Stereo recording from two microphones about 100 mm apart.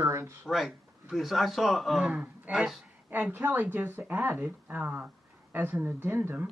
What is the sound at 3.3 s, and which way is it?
Speech, 20° right (ahead or behind).